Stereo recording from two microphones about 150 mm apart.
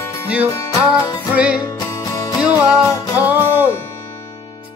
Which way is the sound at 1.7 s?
20° left (ahead or behind).